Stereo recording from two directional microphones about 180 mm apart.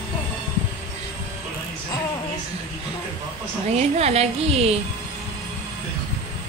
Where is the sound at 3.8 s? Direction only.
35° right (ahead or behind).